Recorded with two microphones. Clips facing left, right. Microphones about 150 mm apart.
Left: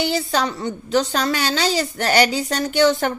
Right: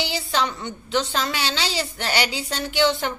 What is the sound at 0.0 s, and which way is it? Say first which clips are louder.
A woman's voice: left 4 dB; 45° left (ahead or behind).